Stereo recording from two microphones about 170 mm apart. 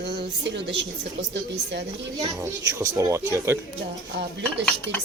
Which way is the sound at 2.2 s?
20° right (ahead or behind).